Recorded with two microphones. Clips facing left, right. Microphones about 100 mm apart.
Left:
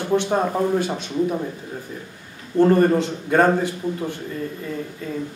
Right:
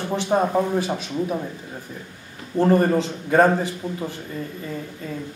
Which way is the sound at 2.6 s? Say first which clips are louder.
Left 2 dB; centre (ahead or behind).